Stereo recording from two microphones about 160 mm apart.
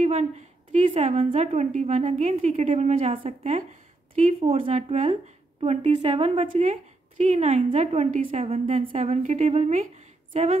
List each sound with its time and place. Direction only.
0.0 s a sound: 45° right (ahead or behind)
1.0 s a woman's voice: 45° right (ahead or behind)
4.4 s a woman's voice: 35° right (ahead or behind)